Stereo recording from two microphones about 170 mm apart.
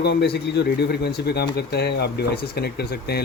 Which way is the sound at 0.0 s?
80° left.